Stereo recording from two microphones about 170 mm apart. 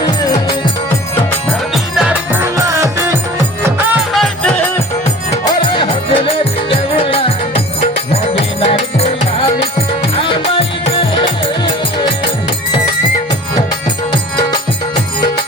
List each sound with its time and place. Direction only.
0.0 s music: 20° left (ahead or behind)
1.7 s music: 5° right (ahead or behind)
3.8 s music: centre (ahead or behind)
5.6 s music: 30° left (ahead or behind)